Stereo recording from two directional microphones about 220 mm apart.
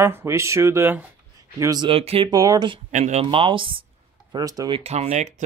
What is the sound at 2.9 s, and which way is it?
Speech, 35° right (ahead or behind).